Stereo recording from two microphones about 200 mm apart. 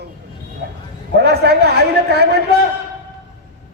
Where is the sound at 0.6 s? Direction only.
55° right (ahead or behind).